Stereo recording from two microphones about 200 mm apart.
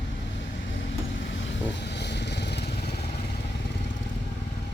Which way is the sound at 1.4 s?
60° left (ahead or behind).